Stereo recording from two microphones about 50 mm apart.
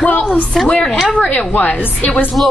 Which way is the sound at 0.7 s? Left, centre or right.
Centre.